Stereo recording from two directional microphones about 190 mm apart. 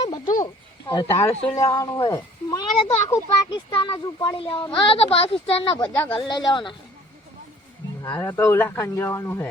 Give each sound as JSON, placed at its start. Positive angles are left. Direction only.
{"t": 0.9, "sound": "speech", "side_deg": 20}
{"t": 5.9, "sound": "speech", "side_deg": 10}
{"t": 6.1, "sound": "speech", "side_deg": 25}
{"t": 8.0, "sound": "speech", "side_deg": 15}